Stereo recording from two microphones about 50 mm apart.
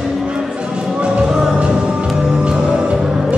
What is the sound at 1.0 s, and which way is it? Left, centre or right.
Music, right.